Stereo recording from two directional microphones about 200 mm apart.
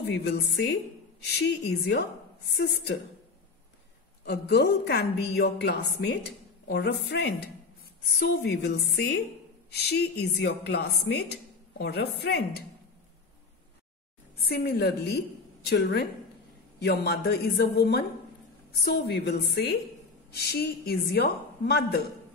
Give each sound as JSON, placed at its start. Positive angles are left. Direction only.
{"t": 0.0, "sound": "a woman's voice", "side_deg": 55}
{"t": 4.2, "sound": "a woman's voice", "side_deg": 55}
{"t": 14.4, "sound": "a woman's voice", "side_deg": 50}